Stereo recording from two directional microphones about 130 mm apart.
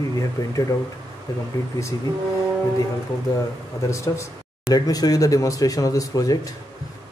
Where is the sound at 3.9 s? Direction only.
25° left (ahead or behind).